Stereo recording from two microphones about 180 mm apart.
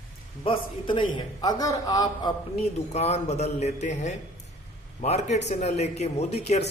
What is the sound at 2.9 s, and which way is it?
Speech, 35° left (ahead or behind).